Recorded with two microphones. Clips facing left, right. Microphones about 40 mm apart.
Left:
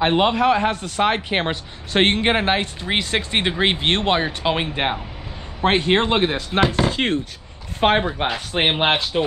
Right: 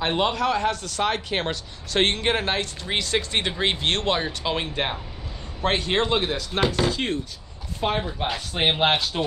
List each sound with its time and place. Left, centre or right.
0.0 s a man's voice: left
6.9 s speech: left
8.5 s a man's voice: left